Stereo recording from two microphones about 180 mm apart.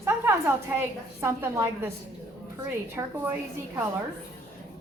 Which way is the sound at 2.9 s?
10° right (ahead or behind).